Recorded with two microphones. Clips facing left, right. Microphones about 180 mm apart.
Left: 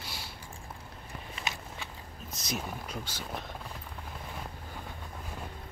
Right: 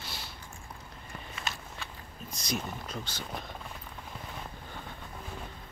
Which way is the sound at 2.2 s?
5° left (ahead or behind).